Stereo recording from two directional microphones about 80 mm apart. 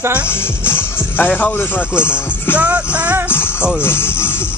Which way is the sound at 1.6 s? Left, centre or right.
Left.